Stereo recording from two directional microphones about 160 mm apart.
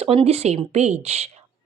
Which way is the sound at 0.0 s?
40° right (ahead or behind).